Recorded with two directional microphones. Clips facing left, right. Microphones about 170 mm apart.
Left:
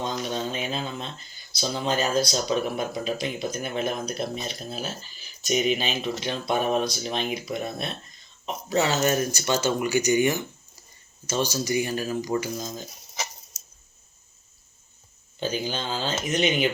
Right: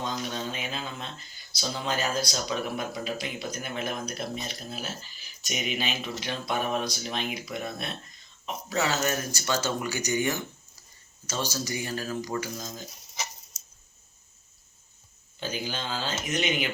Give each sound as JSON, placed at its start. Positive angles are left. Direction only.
{"t": 0.5, "sound": "a sound", "side_deg": 30}
{"t": 1.5, "sound": "speech", "side_deg": 25}
{"t": 15.4, "sound": "speech", "side_deg": 25}